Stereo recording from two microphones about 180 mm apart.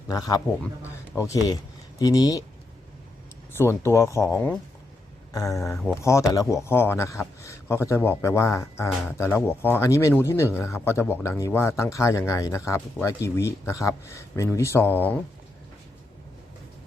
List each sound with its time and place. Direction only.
0.1 s speech: 20° left (ahead or behind)
3.6 s speech: 15° left (ahead or behind)